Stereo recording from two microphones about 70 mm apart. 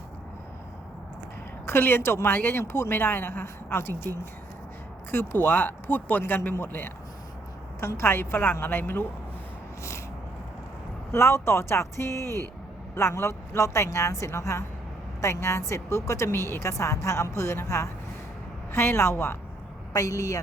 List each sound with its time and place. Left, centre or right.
1.6 s speech: left
5.1 s speech: left
11.1 s a woman's voice: left
19.9 s a woman's voice: left